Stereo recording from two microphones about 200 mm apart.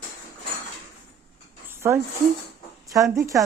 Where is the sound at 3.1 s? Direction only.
15° right (ahead or behind).